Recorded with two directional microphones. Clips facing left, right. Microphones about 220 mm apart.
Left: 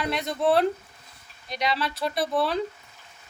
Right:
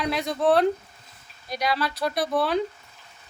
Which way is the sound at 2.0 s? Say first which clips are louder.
Even; centre (ahead or behind).